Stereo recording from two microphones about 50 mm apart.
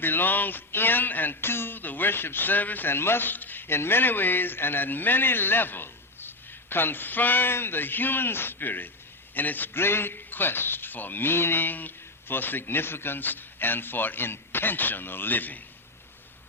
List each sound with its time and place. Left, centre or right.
0.0 s speech: left